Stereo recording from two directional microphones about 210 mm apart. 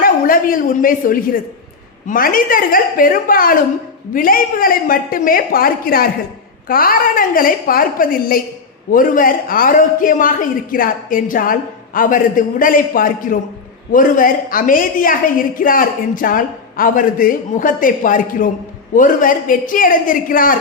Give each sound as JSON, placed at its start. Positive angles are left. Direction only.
{"t": 0.0, "sound": "a woman's voice", "side_deg": 40}